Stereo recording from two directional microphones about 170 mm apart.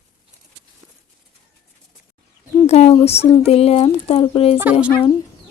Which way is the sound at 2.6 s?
40° left (ahead or behind).